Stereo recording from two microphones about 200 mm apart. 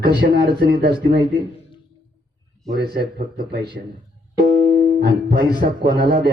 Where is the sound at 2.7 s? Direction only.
55° right (ahead or behind).